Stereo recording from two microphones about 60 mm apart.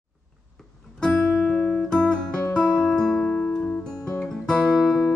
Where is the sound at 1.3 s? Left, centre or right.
Centre.